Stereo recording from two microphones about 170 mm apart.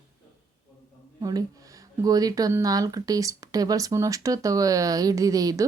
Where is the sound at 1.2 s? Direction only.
20° right (ahead or behind).